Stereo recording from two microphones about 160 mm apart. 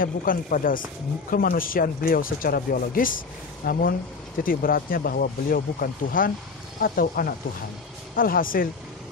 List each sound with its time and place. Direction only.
0.0 s speech: 60° left (ahead or behind)